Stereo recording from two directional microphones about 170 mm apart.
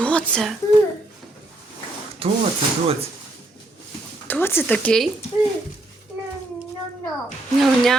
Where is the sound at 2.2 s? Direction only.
35° right (ahead or behind).